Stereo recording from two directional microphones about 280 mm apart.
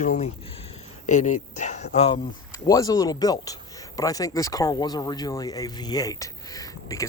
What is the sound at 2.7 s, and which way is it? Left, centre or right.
Speech, centre.